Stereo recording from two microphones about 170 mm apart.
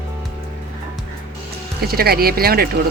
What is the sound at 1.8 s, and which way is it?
Speech, 65° right (ahead or behind).